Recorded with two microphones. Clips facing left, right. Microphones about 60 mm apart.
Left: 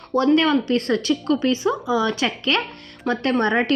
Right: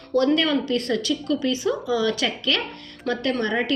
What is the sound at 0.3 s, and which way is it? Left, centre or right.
A woman's voice, left.